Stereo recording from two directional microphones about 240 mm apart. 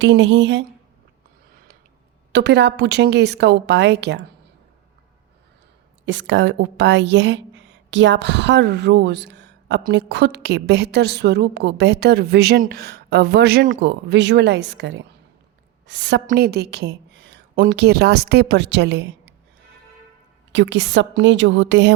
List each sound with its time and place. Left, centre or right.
0.0 s a woman's voice: right
2.3 s a woman's voice: right
6.1 s a woman's voice: right
20.5 s a woman's voice: right